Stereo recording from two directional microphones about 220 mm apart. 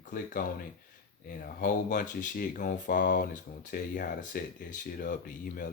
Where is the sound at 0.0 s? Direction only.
40° left (ahead or behind).